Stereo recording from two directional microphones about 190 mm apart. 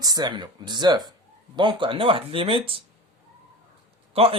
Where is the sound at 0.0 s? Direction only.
20° right (ahead or behind).